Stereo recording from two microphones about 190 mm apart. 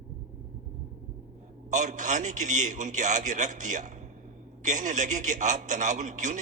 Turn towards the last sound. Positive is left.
turn(degrees=-40)  # may be behind; listen again after turning